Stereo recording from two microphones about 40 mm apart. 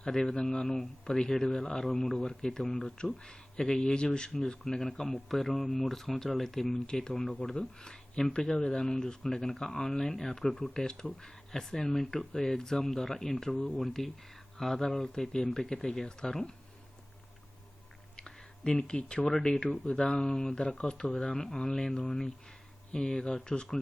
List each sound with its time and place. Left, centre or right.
0.0 s speech: centre
3.0 s speech: left
18.2 s a sound: left
19.3 s speech: centre